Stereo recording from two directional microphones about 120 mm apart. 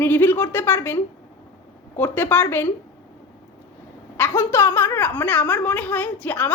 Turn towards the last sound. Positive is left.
turn(degrees=15)  # may be behind; listen again after turning